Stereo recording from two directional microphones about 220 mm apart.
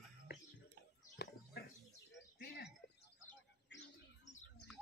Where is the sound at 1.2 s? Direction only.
50° left (ahead or behind).